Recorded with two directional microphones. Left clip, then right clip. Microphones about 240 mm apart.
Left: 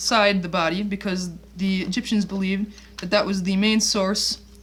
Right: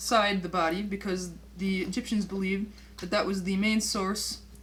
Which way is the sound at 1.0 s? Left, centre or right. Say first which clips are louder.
Left 4 dB; left.